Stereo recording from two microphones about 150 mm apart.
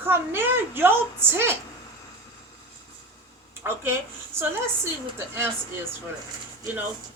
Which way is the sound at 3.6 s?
15° right (ahead or behind).